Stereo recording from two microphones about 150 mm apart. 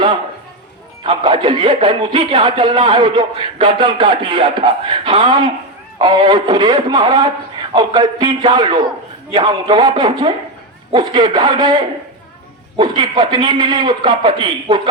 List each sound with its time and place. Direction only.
1.0 s a man's voice: 30° right (ahead or behind)